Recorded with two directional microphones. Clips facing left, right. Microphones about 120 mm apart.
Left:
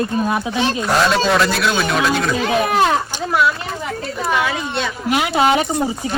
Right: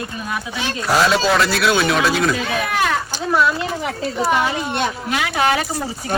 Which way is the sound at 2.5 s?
30° left (ahead or behind).